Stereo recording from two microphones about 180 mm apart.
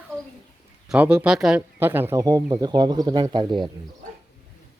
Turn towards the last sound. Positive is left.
turn(degrees=-25)  # may be behind; listen again after turning